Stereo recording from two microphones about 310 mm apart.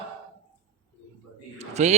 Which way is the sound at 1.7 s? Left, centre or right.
Right.